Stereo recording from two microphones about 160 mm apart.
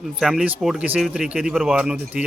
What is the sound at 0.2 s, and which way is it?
Speech, 5° right (ahead or behind).